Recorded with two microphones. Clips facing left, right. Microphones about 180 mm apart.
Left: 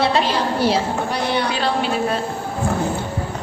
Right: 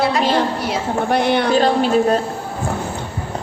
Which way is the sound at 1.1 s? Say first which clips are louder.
Right 6 dB; 50° right (ahead or behind).